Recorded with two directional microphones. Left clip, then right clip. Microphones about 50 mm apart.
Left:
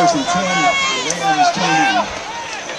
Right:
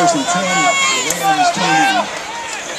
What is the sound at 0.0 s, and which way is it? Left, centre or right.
Speech, centre.